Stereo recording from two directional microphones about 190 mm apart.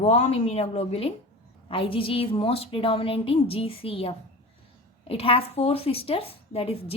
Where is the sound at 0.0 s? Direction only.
35° left (ahead or behind).